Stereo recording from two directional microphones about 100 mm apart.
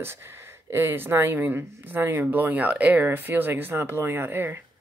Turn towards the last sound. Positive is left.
turn(degrees=-20)  # may be behind; listen again after turning